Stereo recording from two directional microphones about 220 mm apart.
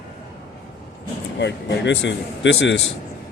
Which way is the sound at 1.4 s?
55° left (ahead or behind).